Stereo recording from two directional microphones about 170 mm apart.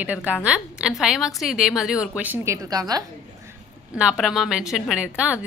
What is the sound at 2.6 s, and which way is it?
Speech, 20° right (ahead or behind).